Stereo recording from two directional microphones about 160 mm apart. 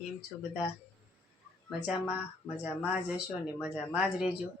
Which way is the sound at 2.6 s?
10° right (ahead or behind).